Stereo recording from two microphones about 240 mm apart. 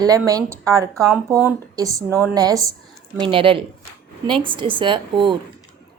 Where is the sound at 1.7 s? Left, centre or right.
Centre.